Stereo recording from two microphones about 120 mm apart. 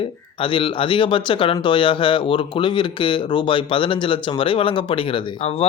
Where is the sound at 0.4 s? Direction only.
45° left (ahead or behind).